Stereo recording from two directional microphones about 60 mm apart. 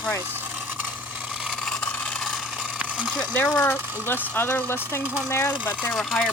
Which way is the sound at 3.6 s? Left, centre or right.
Left.